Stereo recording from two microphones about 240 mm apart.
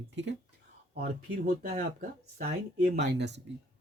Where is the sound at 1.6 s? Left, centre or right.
Right.